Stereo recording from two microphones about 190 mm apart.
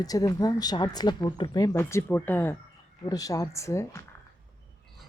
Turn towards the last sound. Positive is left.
turn(degrees=15)  # may be behind; listen again after turning